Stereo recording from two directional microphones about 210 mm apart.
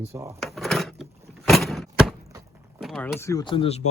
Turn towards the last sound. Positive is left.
turn(degrees=25)  # may be behind; listen again after turning